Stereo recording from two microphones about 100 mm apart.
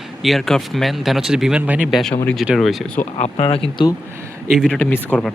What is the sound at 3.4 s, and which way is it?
Speech, 75° left (ahead or behind).